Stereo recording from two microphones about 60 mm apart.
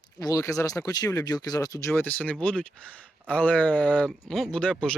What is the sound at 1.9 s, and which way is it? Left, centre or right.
Speech, left.